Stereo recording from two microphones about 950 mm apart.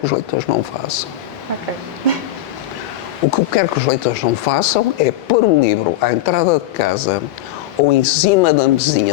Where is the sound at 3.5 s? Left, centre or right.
Left.